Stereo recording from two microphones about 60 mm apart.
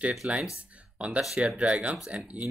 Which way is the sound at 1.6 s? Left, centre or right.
Centre.